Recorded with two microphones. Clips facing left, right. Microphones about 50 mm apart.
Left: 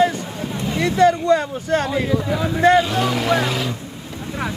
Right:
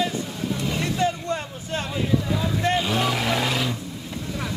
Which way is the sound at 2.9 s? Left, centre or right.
Centre.